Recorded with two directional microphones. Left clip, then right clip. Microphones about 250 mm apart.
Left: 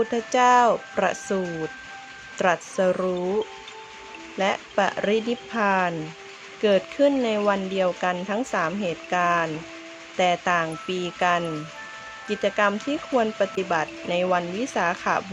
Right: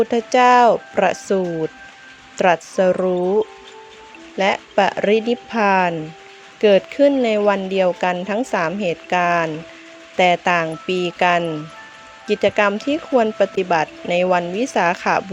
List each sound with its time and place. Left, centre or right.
0.0 s speech: centre
2.4 s speech: centre